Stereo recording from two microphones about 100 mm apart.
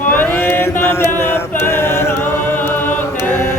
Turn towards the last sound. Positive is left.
turn(degrees=20)  # may be behind; listen again after turning